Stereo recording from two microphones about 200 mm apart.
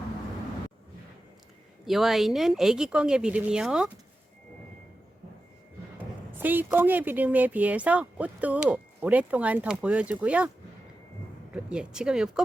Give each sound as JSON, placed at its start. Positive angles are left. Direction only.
{"t": 1.8, "sound": "speech", "side_deg": 0}
{"t": 6.0, "sound": "speech", "side_deg": -10}
{"t": 11.5, "sound": "speech", "side_deg": -5}